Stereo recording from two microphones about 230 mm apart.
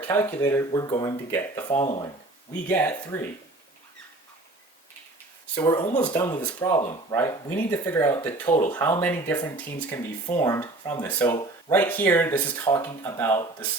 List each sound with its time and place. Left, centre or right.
0.1 s speech: centre
2.6 s speech: centre
5.5 s speech: left